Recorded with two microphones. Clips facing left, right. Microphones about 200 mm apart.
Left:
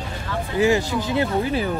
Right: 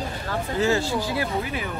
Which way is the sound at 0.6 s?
15° left (ahead or behind).